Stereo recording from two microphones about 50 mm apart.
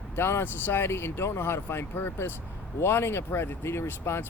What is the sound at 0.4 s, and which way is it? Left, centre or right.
Speech, left.